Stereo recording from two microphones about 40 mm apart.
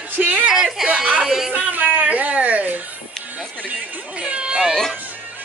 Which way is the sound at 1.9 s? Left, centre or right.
Right.